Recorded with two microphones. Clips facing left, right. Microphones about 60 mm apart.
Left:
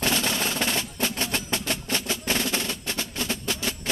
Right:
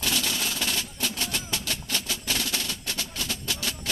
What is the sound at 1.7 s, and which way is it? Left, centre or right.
Music, left.